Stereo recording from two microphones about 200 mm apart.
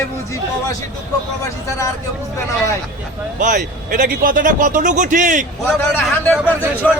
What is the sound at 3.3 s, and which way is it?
A man's voice, 40° right (ahead or behind).